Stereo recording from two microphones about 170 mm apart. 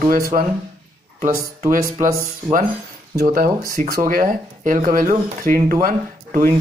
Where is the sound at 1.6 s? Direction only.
50° right (ahead or behind).